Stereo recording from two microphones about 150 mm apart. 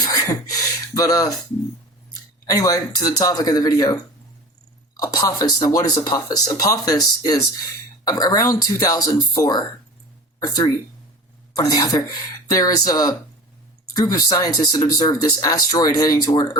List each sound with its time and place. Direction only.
0.0 s a sound: 25° left (ahead or behind)
0.9 s speech: 25° left (ahead or behind)
2.5 s speech: 25° left (ahead or behind)
4.9 s speech: 25° left (ahead or behind)